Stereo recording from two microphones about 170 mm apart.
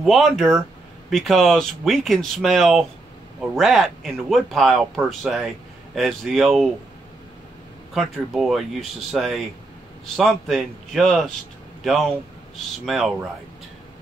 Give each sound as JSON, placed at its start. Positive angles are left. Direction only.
{"t": 0.0, "sound": "speech", "side_deg": 0}
{"t": 7.9, "sound": "speech", "side_deg": 0}